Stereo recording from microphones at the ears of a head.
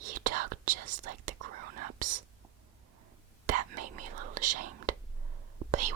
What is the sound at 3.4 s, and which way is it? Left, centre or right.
Whispering, right.